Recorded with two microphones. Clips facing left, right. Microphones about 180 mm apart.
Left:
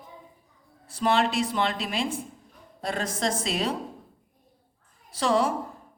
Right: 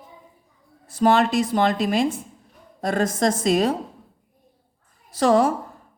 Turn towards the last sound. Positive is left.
turn(degrees=-45)  # may be behind; listen again after turning